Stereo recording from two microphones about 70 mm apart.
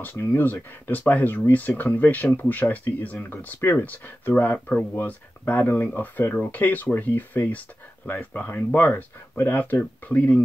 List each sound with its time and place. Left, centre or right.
0.0 s speech: left